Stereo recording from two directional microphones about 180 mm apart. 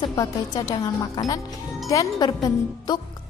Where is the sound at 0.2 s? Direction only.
20° left (ahead or behind).